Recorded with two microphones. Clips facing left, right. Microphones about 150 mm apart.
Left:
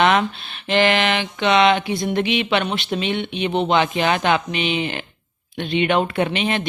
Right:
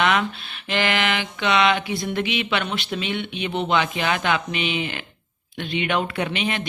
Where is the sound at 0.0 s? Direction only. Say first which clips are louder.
Left 4 dB; 35° left (ahead or behind).